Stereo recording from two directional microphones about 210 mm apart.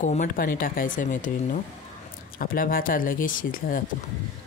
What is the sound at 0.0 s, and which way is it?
Speech, 35° left (ahead or behind).